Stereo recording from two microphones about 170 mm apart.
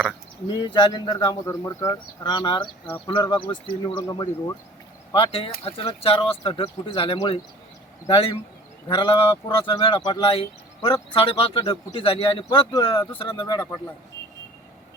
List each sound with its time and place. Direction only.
0.4 s speech: 25° left (ahead or behind)
5.1 s a man's voice: 30° left (ahead or behind)